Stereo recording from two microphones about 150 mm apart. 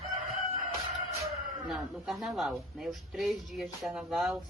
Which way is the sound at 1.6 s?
Centre (ahead or behind).